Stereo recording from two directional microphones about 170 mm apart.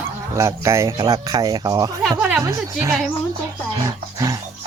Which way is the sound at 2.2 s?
10° right (ahead or behind).